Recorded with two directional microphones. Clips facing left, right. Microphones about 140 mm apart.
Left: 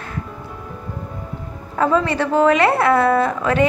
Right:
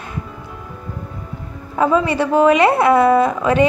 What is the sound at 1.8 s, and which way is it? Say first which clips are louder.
A woman's voice: right 2 dB; 15° right (ahead or behind).